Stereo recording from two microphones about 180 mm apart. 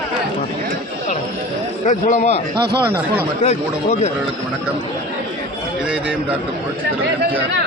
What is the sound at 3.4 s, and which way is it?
Speech, 40° left (ahead or behind).